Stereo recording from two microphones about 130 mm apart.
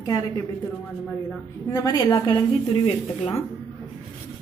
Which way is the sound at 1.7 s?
25° left (ahead or behind).